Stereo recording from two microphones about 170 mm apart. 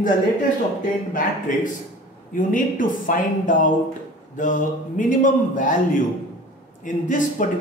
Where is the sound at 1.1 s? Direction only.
50° left (ahead or behind).